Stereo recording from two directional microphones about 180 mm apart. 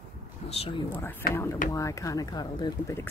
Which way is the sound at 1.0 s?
10° left (ahead or behind).